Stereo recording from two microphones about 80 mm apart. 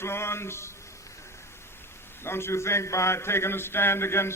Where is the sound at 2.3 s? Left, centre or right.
Left.